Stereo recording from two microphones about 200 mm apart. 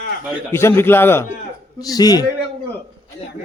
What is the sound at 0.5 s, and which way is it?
A man's voice, 10° left (ahead or behind).